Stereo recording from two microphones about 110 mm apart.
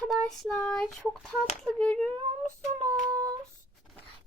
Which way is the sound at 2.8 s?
35° right (ahead or behind).